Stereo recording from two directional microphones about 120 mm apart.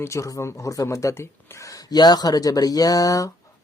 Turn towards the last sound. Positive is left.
turn(degrees=30)  # may be behind; listen again after turning